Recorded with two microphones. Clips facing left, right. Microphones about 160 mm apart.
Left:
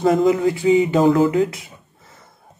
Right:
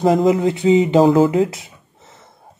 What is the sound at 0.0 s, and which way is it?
Speech, 25° right (ahead or behind).